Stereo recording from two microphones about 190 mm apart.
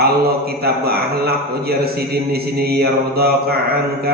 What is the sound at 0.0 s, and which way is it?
A man's voice, 55° right (ahead or behind).